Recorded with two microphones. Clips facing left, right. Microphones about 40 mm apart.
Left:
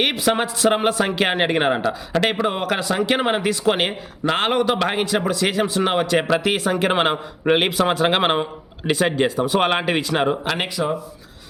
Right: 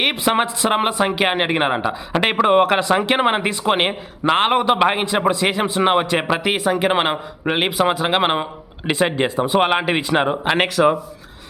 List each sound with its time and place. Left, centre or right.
0.1 s a man's voice: right
2.3 s a man's voice: right; by 8.4 s centre
8.9 s a man's voice: right
9.6 s speech: centre
10.8 s speech: right